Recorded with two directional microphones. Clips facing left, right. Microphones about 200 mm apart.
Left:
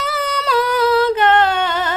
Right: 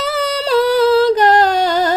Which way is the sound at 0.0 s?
35° right (ahead or behind).